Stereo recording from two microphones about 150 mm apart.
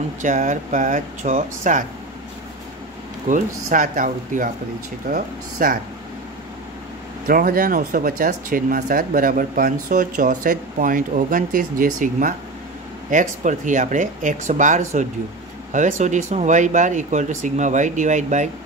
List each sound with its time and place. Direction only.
0.2 s speech: 55° right (ahead or behind)
3.3 s speech: 60° right (ahead or behind)
7.2 s speech: 70° right (ahead or behind)